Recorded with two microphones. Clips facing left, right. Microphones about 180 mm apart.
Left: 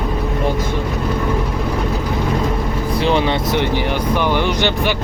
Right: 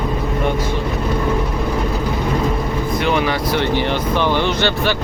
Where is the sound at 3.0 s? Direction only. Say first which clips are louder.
Left 3 dB; 30° left (ahead or behind).